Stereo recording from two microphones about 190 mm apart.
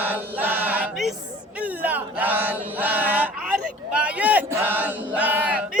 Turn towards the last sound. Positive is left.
turn(degrees=-5)  # may be behind; listen again after turning